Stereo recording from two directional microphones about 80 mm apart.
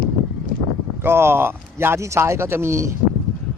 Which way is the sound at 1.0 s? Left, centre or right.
Right.